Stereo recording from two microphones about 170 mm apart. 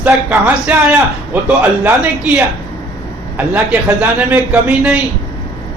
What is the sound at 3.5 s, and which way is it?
A man's voice, 10° right (ahead or behind).